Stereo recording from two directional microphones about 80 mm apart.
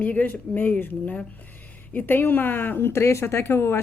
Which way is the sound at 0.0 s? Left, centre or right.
Left.